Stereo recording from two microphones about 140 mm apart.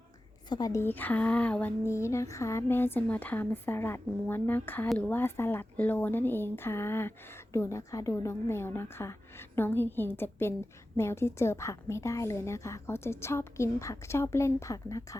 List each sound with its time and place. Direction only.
0.4 s a woman's voice: 30° left (ahead or behind)